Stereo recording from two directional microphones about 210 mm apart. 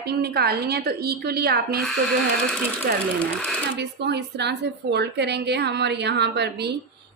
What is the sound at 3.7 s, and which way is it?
A woman's voice, 55° right (ahead or behind).